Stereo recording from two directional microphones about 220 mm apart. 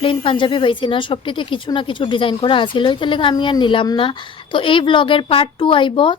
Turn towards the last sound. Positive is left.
turn(degrees=20)  # may be behind; listen again after turning